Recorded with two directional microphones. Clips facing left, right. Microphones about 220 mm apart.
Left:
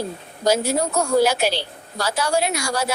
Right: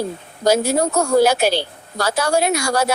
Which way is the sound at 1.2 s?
50° right (ahead or behind).